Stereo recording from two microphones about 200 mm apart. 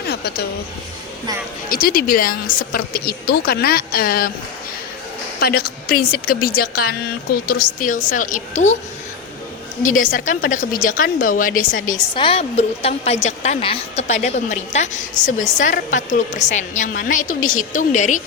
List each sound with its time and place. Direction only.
0.1 s a sound: 55° left (ahead or behind)
1.7 s speech: 45° left (ahead or behind)
5.6 s a woman's voice: 50° left (ahead or behind)
9.9 s speech: 40° left (ahead or behind)
12.1 s a woman's voice: 25° left (ahead or behind)